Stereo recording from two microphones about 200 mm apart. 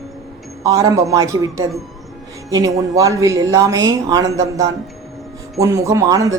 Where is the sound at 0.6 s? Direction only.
15° right (ahead or behind).